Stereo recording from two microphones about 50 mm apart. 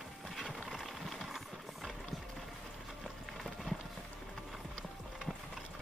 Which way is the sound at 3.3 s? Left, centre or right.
Centre.